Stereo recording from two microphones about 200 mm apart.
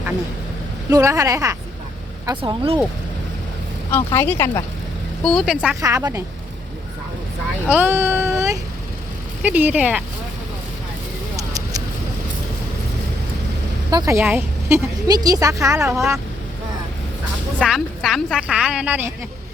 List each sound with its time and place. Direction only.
0.9 s a woman's voice: 15° right (ahead or behind)
3.9 s speech: 10° left (ahead or behind)
5.2 s a woman's voice: centre (ahead or behind)
5.8 s a woman's voice: 15° right (ahead or behind)
7.7 s a woman's voice: 10° right (ahead or behind)
13.9 s a woman's voice: 15° right (ahead or behind)
17.6 s a woman's voice: centre (ahead or behind)